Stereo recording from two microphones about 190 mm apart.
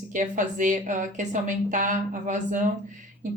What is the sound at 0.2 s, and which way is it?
A woman's voice, 40° right (ahead or behind).